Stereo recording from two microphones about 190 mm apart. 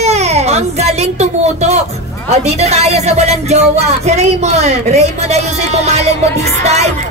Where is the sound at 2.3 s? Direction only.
35° right (ahead or behind).